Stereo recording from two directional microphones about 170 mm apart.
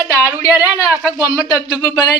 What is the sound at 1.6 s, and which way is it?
Speech, 20° left (ahead or behind).